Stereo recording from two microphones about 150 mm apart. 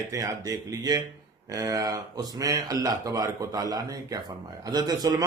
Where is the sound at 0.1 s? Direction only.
20° right (ahead or behind).